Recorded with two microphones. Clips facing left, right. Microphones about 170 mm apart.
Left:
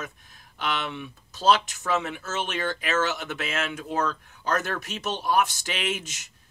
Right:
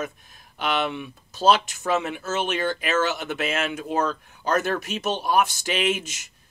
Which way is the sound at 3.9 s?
25° right (ahead or behind).